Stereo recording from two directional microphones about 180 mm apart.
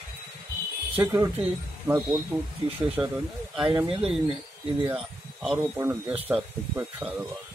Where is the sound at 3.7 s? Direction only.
30° right (ahead or behind).